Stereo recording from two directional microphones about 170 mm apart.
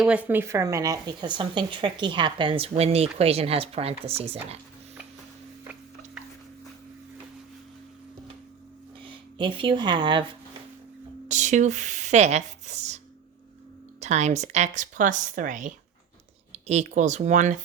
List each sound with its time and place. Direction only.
0.0 s speech: 10° right (ahead or behind); by 4.4 s 35° right (ahead or behind)
9.0 s speech: 30° right (ahead or behind)
11.3 s speech: 45° right (ahead or behind)
14.0 s speech: 40° right (ahead or behind)